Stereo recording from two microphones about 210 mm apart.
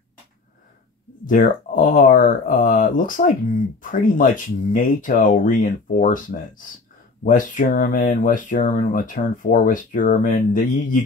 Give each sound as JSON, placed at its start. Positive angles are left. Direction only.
{"t": 1.2, "sound": "speech", "side_deg": 40}